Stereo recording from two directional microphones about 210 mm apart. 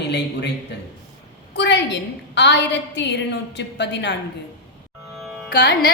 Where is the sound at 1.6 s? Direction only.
55° left (ahead or behind).